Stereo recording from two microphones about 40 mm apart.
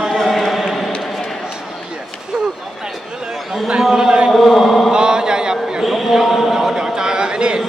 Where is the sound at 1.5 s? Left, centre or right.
Centre.